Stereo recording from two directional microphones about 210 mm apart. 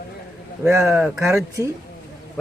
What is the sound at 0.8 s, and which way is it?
Speech, 5° right (ahead or behind).